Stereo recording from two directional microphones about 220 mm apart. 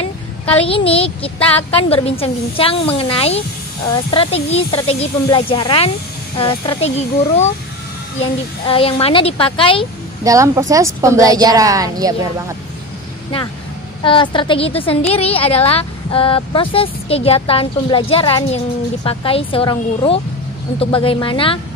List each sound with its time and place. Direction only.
0.0 s a woman's voice: 25° left (ahead or behind)
8.6 s a woman's voice: 25° left (ahead or behind)
10.2 s a woman's voice: 15° right (ahead or behind)
14.0 s a woman's voice: 20° left (ahead or behind)